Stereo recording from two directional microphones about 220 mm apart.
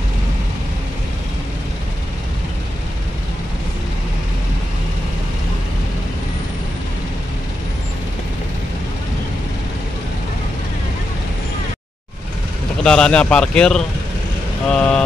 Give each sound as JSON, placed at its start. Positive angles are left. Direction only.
{"t": 12.8, "sound": "a man's voice", "side_deg": 5}